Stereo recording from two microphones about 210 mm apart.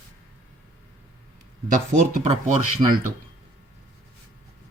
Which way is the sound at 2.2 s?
30° right (ahead or behind).